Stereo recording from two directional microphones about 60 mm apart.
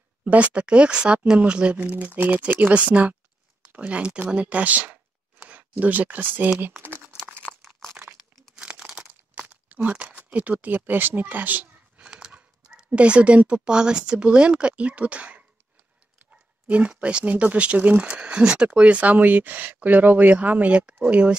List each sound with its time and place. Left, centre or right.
0.2 s speech: right
8.5 s crumpling: centre
9.3 s a sound: right
12.1 s speech: centre
16.3 s a sound: right
16.9 s speech: centre